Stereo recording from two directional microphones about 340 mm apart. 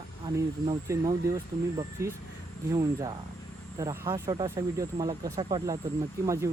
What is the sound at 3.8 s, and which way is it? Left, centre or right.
Speech, centre.